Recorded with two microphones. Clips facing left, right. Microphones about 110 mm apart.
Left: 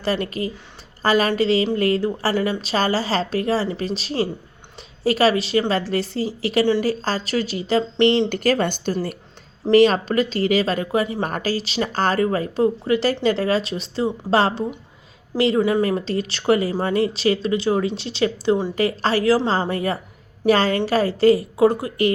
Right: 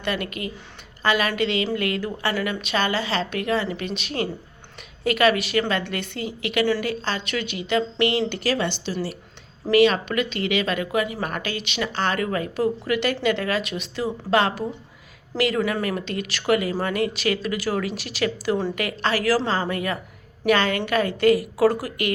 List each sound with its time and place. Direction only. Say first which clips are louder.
0.0 s a woman's voice: left 4 dB; 35° left (ahead or behind)
8.3 s a woman's voice: left 4 dB; 45° left (ahead or behind); by 22.1 s 30° left (ahead or behind)